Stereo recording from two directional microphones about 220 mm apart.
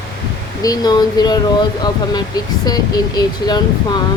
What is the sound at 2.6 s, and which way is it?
Speech, 20° left (ahead or behind).